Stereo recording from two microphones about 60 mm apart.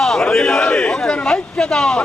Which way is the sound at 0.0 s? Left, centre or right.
Centre.